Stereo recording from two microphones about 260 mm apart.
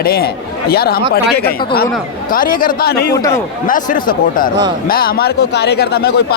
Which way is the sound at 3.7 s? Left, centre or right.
Left.